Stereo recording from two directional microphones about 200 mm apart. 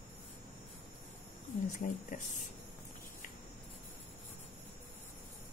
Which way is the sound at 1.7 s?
40° left (ahead or behind).